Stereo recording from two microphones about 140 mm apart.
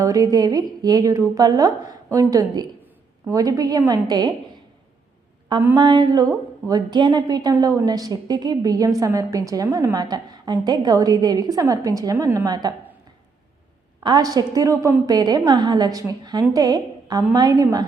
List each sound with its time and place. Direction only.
0.0 s a woman's voice: 25° right (ahead or behind)
5.7 s a woman's voice: 30° right (ahead or behind)
12.5 s a woman's voice: 30° right (ahead or behind)
14.0 s a woman's voice: 30° right (ahead or behind)